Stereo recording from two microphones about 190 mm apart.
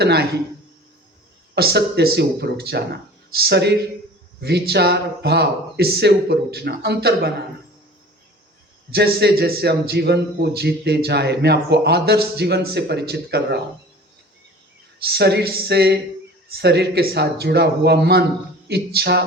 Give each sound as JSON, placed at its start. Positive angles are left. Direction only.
{"t": 0.0, "sound": "a man's voice", "side_deg": -55}
{"t": 1.5, "sound": "a man's voice", "side_deg": -55}
{"t": 8.9, "sound": "a man's voice", "side_deg": -55}
{"t": 15.0, "sound": "a man's voice", "side_deg": -60}